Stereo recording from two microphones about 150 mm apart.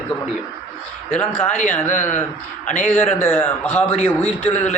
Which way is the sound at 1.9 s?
55° left (ahead or behind).